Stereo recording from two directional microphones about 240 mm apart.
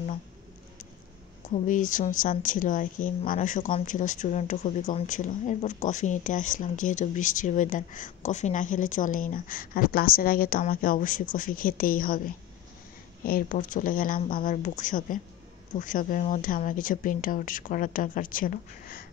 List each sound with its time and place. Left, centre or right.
1.7 s speech: left
13.2 s speech: left